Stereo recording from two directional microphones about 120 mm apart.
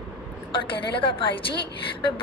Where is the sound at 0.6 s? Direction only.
45° left (ahead or behind).